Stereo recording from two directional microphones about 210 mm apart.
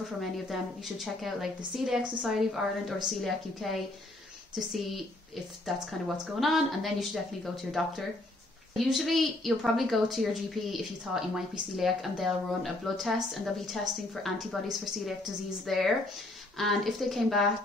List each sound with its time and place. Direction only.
0.2 s a woman's voice: centre (ahead or behind)